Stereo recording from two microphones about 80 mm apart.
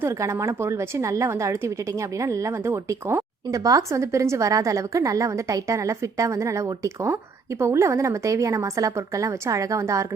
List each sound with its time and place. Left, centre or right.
0.0 s a woman's voice: right
2.6 s speech: right
3.5 s a woman's voice: right